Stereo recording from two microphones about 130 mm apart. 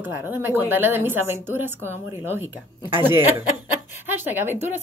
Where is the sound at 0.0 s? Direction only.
15° right (ahead or behind).